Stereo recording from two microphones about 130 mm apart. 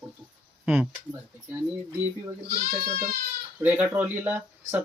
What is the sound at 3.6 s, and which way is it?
Speech, 15° right (ahead or behind).